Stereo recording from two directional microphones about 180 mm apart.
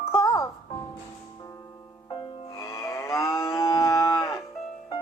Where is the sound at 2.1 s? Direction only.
30° left (ahead or behind).